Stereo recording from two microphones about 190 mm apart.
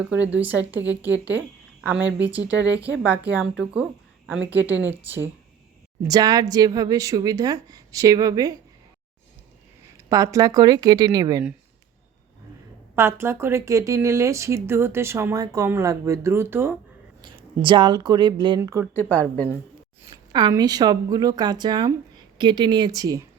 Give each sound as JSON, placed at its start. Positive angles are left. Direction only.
{"t": 0.3, "sound": "speech", "side_deg": -5}
{"t": 2.6, "sound": "speech", "side_deg": -70}
{"t": 2.9, "sound": "speech", "side_deg": -5}
{"t": 10.1, "sound": "speech", "side_deg": -15}
{"t": 13.0, "sound": "speech", "side_deg": -15}
{"t": 17.2, "sound": "speech", "side_deg": -25}
{"t": 18.9, "sound": "a woman's voice", "side_deg": 5}
{"t": 20.0, "sound": "speech", "side_deg": -20}